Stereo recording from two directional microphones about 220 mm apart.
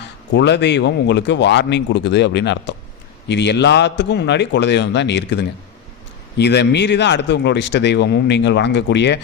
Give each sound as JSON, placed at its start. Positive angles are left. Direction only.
{"t": 0.3, "sound": "speech", "side_deg": 55}